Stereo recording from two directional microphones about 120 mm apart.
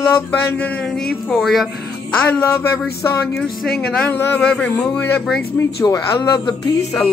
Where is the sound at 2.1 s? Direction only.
15° left (ahead or behind).